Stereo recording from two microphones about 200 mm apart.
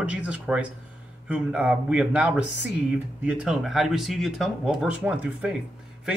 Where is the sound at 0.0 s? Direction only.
5° right (ahead or behind).